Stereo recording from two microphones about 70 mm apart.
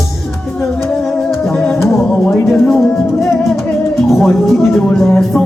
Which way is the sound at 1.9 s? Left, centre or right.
Centre.